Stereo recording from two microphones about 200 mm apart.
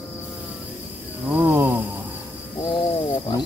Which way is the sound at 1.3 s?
10° right (ahead or behind).